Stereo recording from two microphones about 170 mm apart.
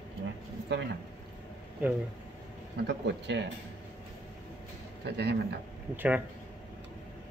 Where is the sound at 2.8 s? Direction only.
90° right.